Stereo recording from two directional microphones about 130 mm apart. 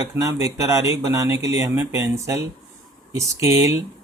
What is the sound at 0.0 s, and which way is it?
Speech, 25° right (ahead or behind).